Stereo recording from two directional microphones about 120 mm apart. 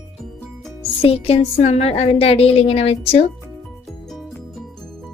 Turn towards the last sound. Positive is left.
turn(degrees=60)  # may be behind; listen again after turning